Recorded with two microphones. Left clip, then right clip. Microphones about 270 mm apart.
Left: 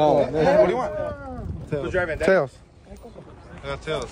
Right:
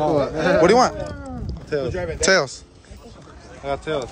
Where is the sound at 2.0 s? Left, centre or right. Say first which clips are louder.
Right 1 dB; centre.